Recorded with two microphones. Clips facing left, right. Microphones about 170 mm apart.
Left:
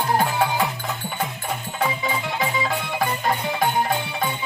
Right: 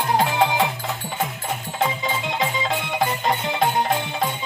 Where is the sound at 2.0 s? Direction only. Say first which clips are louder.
Right 1 dB; 20° right (ahead or behind).